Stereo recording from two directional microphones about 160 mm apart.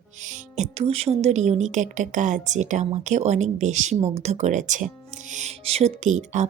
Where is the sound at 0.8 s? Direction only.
40° right (ahead or behind).